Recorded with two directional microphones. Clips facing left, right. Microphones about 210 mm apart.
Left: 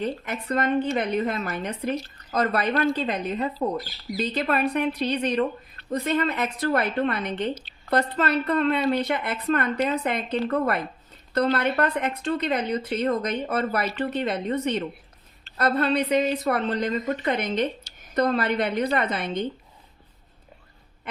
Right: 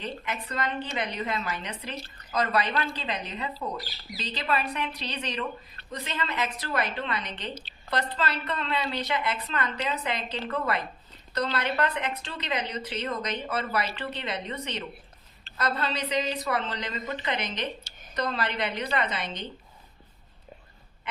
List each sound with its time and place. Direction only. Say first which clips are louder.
0.0 s a woman's voice: left 6 dB; 50° left (ahead or behind)